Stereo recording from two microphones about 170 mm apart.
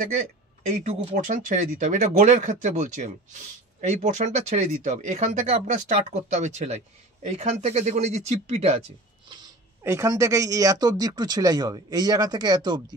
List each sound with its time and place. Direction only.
0.7 s speech: 45° right (ahead or behind)
9.8 s speech: 15° right (ahead or behind)